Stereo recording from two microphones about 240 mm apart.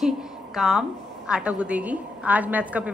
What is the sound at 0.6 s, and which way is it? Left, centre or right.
A woman's voice, centre.